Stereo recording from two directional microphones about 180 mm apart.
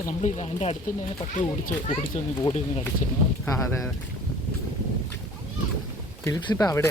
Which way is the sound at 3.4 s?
15° left (ahead or behind).